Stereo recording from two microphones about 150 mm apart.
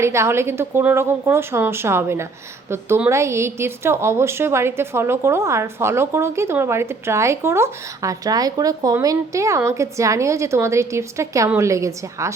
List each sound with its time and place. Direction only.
0.0 s a woman's voice: 20° right (ahead or behind)